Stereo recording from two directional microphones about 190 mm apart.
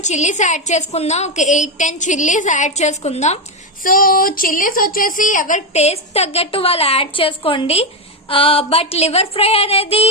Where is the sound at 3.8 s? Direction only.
45° left (ahead or behind).